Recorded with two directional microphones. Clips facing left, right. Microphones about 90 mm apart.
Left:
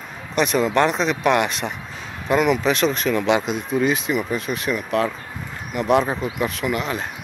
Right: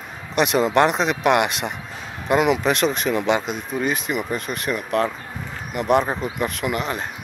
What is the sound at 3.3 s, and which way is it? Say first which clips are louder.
Speech: left 2 dB; centre (ahead or behind).